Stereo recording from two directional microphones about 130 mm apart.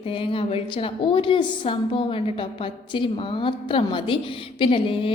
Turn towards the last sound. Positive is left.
turn(degrees=40)  # may be behind; listen again after turning